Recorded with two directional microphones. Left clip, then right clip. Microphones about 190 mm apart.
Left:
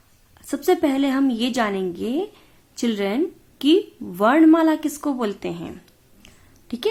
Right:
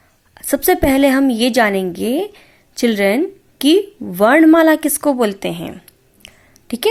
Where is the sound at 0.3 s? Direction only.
35° right (ahead or behind).